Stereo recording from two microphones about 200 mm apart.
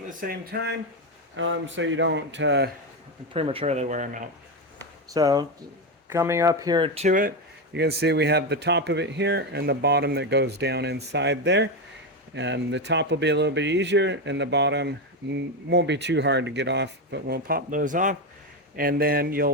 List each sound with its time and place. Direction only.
0.2 s speech: 50° right (ahead or behind)
1.4 s speech: 70° right (ahead or behind)
3.3 s speech: 30° right (ahead or behind)
5.1 s speech: 20° right (ahead or behind); by 7.3 s 45° right (ahead or behind)
7.7 s speech: 55° right (ahead or behind)